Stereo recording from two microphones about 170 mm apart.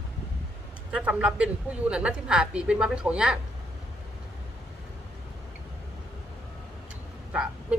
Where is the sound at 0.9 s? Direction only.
5° right (ahead or behind).